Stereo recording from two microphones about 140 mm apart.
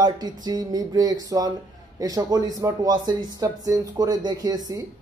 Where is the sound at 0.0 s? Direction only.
30° right (ahead or behind).